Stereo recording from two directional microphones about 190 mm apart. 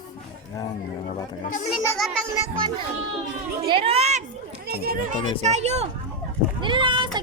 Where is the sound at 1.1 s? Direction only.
35° left (ahead or behind).